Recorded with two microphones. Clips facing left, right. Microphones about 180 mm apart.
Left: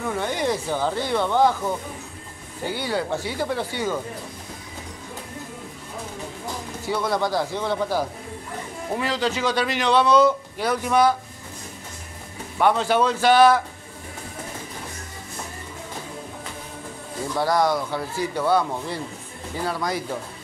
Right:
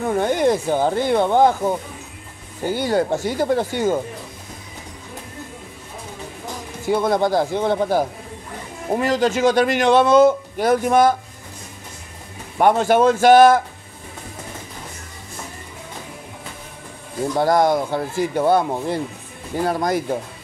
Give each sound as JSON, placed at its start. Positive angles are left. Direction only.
{"t": 0.1, "sound": "a man's voice", "side_deg": -50}
{"t": 2.7, "sound": "a man's voice", "side_deg": -45}
{"t": 6.9, "sound": "a man's voice", "side_deg": -50}
{"t": 12.5, "sound": "a man's voice", "side_deg": -50}
{"t": 17.4, "sound": "a man's voice", "side_deg": -50}